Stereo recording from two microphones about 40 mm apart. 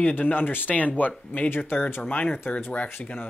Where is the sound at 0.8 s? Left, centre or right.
Left.